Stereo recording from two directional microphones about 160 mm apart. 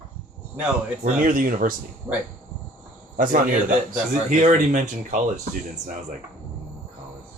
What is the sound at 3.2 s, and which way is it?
A man's voice, 55° right (ahead or behind).